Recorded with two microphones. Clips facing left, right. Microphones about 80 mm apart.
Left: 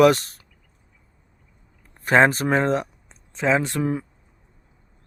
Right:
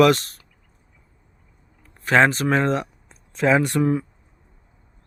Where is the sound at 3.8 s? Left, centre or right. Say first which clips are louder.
Right 4 dB; centre.